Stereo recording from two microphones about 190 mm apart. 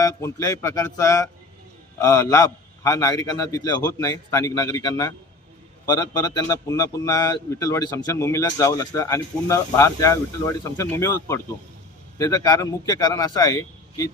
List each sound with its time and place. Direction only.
0.0 s a man's voice: 15° left (ahead or behind)